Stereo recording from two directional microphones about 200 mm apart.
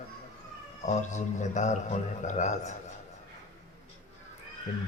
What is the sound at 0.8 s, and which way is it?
A man's voice, 35° left (ahead or behind).